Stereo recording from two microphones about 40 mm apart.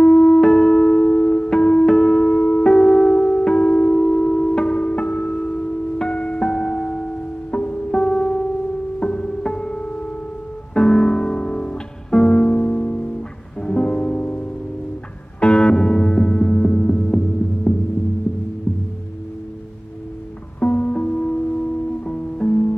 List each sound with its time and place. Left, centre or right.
0.0 s music: left
7.5 s music: left
8.0 s music: left
12.5 s music: left
17.7 s hum: left
20.6 s music: left